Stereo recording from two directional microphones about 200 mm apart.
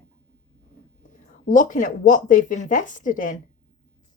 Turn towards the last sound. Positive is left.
turn(degrees=40)  # may be behind; listen again after turning